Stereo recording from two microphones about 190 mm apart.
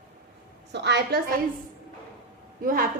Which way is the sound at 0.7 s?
65° right (ahead or behind).